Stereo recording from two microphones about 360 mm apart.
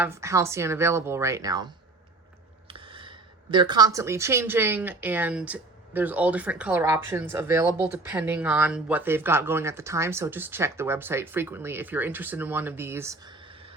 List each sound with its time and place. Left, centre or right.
0.0 s speech: centre
2.7 s a sound: centre
3.5 s speech: centre